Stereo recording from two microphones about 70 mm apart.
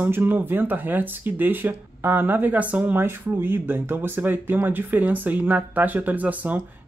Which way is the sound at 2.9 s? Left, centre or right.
Right.